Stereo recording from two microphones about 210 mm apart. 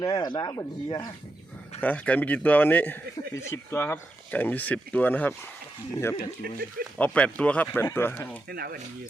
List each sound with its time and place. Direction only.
0.0 s a man's voice: 20° left (ahead or behind)
6.4 s speech: 45° right (ahead or behind)
7.0 s a man's voice: 5° left (ahead or behind)
8.4 s speech: 45° right (ahead or behind)